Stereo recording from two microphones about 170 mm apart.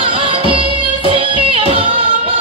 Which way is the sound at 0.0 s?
30° right (ahead or behind).